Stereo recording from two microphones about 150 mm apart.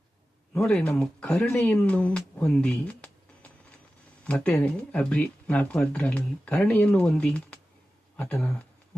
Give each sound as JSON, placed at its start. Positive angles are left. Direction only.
{"t": 0.5, "sound": "speech", "side_deg": 5}